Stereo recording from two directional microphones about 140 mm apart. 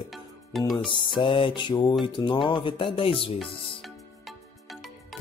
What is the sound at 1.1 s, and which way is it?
Speech, 35° left (ahead or behind).